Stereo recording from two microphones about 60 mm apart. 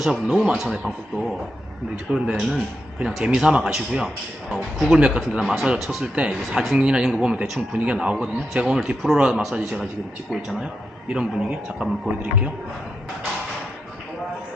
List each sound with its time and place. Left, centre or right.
0.0 s speech: centre
3.2 s speech: centre
3.9 s speech: centre
4.9 s speech: centre
6.1 s speech: centre
6.5 s speech: centre
6.7 s speech: centre
11.1 s speech: centre